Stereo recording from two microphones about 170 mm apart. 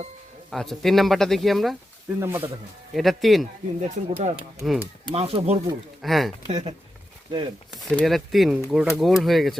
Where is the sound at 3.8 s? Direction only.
40° right (ahead or behind).